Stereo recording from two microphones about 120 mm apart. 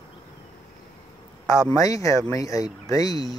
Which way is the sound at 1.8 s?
25° left (ahead or behind).